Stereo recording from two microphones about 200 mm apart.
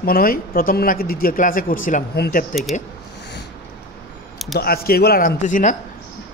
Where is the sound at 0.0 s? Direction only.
45° left (ahead or behind).